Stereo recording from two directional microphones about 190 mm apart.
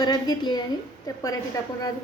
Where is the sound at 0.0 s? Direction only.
20° left (ahead or behind).